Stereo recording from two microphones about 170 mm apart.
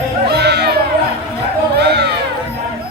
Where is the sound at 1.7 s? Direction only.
75° right (ahead or behind).